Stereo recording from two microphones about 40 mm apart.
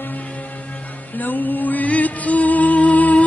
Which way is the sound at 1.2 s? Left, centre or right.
Left.